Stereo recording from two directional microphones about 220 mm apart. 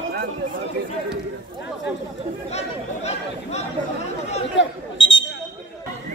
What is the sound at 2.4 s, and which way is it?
Chatter, 30° left (ahead or behind).